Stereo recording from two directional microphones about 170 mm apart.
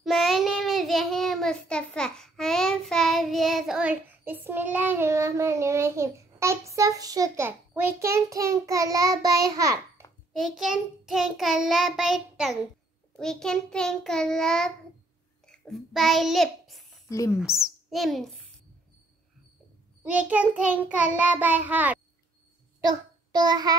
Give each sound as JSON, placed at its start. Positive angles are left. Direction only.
{"t": 0.0, "sound": "child singing", "side_deg": 0}
{"t": 10.3, "sound": "child singing", "side_deg": 0}
{"t": 17.1, "sound": "speech", "side_deg": 20}
{"t": 17.8, "sound": "a child's voice", "side_deg": 0}
{"t": 20.0, "sound": "child singing", "side_deg": -10}
{"t": 22.8, "sound": "child singing", "side_deg": -25}